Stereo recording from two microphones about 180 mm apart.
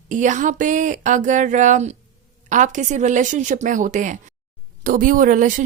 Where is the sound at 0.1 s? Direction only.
45° right (ahead or behind).